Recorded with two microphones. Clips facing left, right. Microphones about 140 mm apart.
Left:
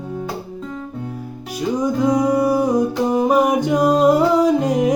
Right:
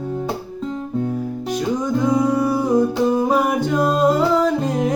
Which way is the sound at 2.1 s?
15° left (ahead or behind).